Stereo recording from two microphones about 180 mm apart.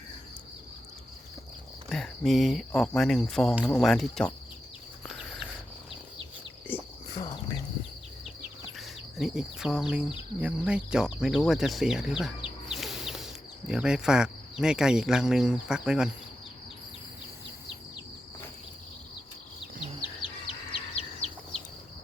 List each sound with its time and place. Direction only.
1.9 s speech: centre (ahead or behind)
5.0 s cricket: centre (ahead or behind)
6.7 s cricket: 10° left (ahead or behind)
7.1 s cricket: 20° left (ahead or behind)
8.8 s speech: centre (ahead or behind)
20.7 s bird: 35° left (ahead or behind)